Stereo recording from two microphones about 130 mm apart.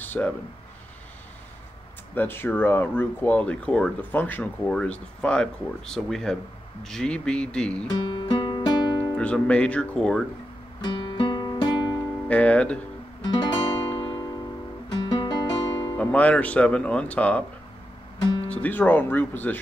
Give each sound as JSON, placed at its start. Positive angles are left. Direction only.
{"t": 0.0, "sound": "a sound", "side_deg": 15}
{"t": 2.1, "sound": "speech", "side_deg": 15}
{"t": 7.9, "sound": "music", "side_deg": 35}
{"t": 9.1, "sound": "speech", "side_deg": 10}
{"t": 10.8, "sound": "music", "side_deg": 40}
{"t": 12.3, "sound": "speech", "side_deg": 10}
{"t": 13.2, "sound": "guitar", "side_deg": 35}
{"t": 15.0, "sound": "music", "side_deg": 35}
{"t": 16.0, "sound": "speech", "side_deg": 10}
{"t": 18.5, "sound": "speech", "side_deg": 15}